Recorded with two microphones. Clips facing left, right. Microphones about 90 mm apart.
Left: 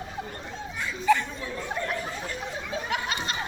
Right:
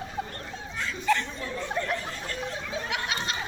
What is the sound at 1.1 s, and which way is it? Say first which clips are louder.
Chatter: left 3 dB; 10° left (ahead or behind).